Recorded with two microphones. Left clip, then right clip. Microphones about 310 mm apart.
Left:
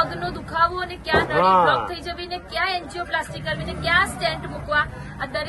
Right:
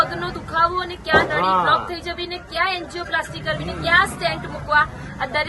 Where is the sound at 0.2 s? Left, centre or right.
Centre.